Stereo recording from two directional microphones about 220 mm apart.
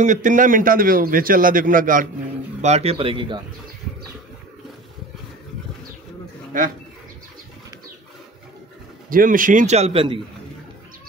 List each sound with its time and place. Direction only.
0.0 s a man's voice: 35° right (ahead or behind)
6.5 s a man's voice: 35° right (ahead or behind)
9.1 s a man's voice: 40° right (ahead or behind)